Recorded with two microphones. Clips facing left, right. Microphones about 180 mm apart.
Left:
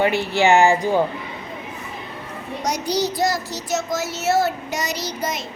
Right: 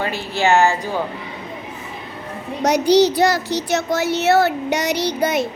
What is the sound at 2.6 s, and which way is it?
Speech, 70° right (ahead or behind).